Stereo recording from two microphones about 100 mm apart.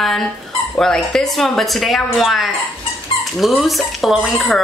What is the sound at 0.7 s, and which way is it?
A woman's voice, 5° left (ahead or behind).